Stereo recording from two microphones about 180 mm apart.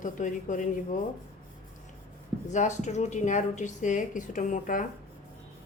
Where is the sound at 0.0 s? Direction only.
45° left (ahead or behind).